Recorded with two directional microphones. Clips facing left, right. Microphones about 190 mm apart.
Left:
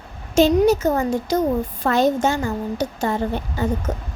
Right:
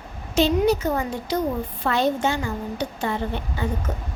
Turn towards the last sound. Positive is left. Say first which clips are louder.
# left 4 dB
turn(degrees=40)  # may be behind; listen again after turning